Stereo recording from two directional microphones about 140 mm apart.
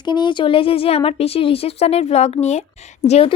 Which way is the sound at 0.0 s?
35° left (ahead or behind).